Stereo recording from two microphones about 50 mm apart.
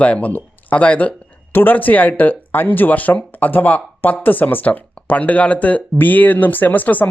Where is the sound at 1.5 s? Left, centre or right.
Left.